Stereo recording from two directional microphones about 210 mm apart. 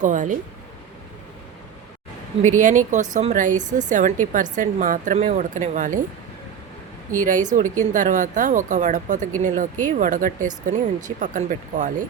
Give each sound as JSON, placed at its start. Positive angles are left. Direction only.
{"t": 0.0, "sound": "a woman's voice", "side_deg": -35}
{"t": 2.4, "sound": "a woman's voice", "side_deg": -35}
{"t": 7.1, "sound": "a woman's voice", "side_deg": -40}